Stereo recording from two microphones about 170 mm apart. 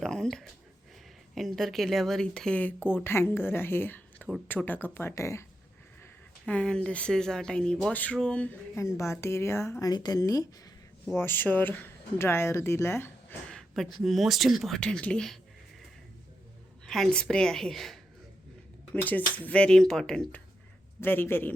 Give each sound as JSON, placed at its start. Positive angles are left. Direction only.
{"t": 0.0, "sound": "a sound", "side_deg": 5}
{"t": 1.4, "sound": "speech", "side_deg": 0}
{"t": 6.0, "sound": "speech", "side_deg": 5}
{"t": 13.5, "sound": "speech", "side_deg": 0}
{"t": 16.8, "sound": "speech", "side_deg": 5}